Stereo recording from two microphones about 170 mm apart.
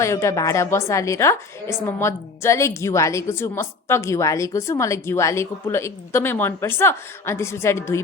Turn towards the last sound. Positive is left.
turn(degrees=15)  # may be behind; listen again after turning